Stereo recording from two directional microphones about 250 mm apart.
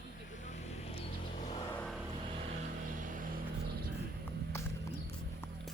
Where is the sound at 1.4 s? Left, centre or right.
Left.